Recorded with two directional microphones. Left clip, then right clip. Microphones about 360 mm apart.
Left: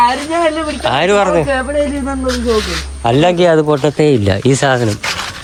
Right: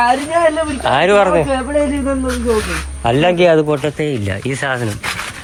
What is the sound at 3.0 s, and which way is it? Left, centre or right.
Speech, centre.